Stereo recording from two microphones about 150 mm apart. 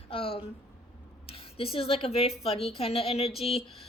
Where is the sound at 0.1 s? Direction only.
40° left (ahead or behind).